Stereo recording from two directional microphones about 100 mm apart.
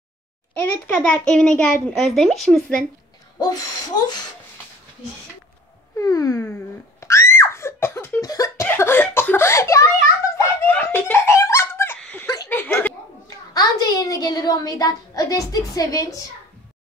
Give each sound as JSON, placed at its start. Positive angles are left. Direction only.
{"t": 0.6, "sound": "a child's voice", "side_deg": 20}
{"t": 3.3, "sound": "a woman's voice", "side_deg": 40}
{"t": 5.9, "sound": "a woman's voice", "side_deg": 35}
{"t": 7.0, "sound": "screaming", "side_deg": 30}
{"t": 8.2, "sound": "a sound", "side_deg": 35}
{"t": 8.6, "sound": "a sound", "side_deg": 25}
{"t": 10.7, "sound": "giggle", "side_deg": 20}
{"t": 12.0, "sound": "laughter", "side_deg": 15}
{"t": 12.4, "sound": "chuckle", "side_deg": 20}
{"t": 13.5, "sound": "a woman's voice", "side_deg": 40}